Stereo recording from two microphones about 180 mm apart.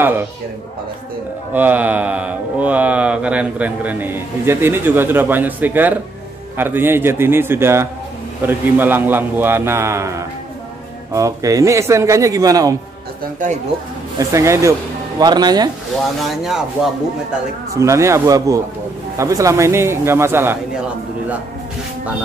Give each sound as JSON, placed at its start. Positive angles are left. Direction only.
{"t": 1.5, "sound": "speech", "side_deg": -10}
{"t": 14.1, "sound": "speech", "side_deg": -15}
{"t": 16.2, "sound": "speech", "side_deg": 0}
{"t": 17.7, "sound": "speech", "side_deg": -15}